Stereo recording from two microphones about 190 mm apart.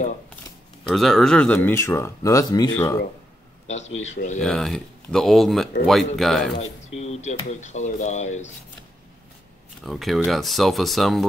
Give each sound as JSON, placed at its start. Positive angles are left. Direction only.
{"t": 0.8, "sound": "speech", "side_deg": 0}
{"t": 4.1, "sound": "speech", "side_deg": 40}
{"t": 4.4, "sound": "speech", "side_deg": 0}
{"t": 7.0, "sound": "speech", "side_deg": 35}
{"t": 9.8, "sound": "speech", "side_deg": 0}